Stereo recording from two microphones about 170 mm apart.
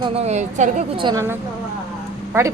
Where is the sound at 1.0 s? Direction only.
25° right (ahead or behind).